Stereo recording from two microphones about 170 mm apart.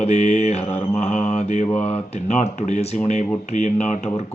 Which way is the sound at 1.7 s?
10° left (ahead or behind).